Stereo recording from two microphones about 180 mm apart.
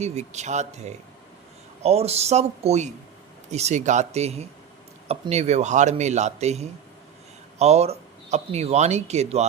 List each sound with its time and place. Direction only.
0.0 s speech: 40° right (ahead or behind)